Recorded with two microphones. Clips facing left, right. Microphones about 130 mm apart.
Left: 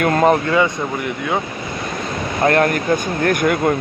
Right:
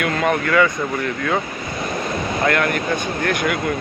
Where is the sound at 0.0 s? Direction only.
40° left (ahead or behind).